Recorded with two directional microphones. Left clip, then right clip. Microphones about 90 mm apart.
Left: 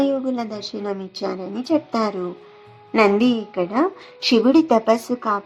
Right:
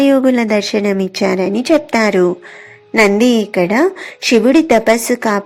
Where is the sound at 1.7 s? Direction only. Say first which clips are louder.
Right 8 dB; 40° right (ahead or behind).